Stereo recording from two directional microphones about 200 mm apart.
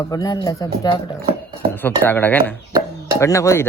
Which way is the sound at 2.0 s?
10° left (ahead or behind).